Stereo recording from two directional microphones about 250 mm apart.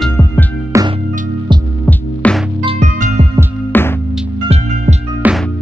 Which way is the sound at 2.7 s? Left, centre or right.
Right.